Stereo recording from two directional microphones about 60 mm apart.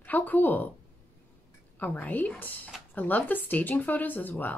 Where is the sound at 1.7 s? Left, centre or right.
Left.